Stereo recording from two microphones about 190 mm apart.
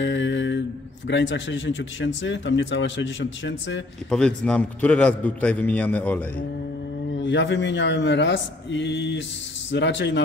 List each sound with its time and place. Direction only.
0.0 s mantra: 70° left (ahead or behind)
1.0 s speech: 70° left (ahead or behind)
4.1 s a man's voice: 5° left (ahead or behind)
7.1 s speech: 70° left (ahead or behind)